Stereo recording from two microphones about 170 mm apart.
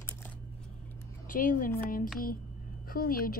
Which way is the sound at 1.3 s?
50° left (ahead or behind).